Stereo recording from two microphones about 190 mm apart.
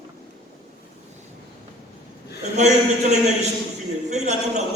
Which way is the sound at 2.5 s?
35° right (ahead or behind).